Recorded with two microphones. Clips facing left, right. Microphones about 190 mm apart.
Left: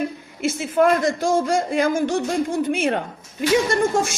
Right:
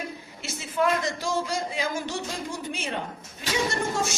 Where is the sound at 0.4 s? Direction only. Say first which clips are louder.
Left 8 dB; 50° left (ahead or behind).